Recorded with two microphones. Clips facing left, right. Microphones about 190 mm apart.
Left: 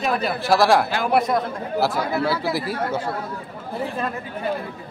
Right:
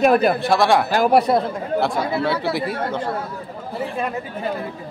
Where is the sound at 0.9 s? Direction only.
40° right (ahead or behind).